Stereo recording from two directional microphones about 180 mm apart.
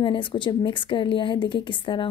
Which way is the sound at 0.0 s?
30° left (ahead or behind).